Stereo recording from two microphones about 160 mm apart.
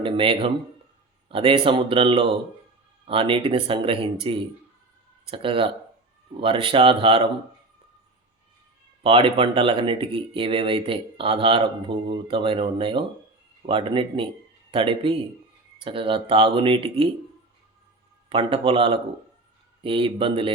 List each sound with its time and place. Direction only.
0.0 s speech: 35° right (ahead or behind)
9.0 s speech: 35° right (ahead or behind)
18.3 s speech: 35° right (ahead or behind)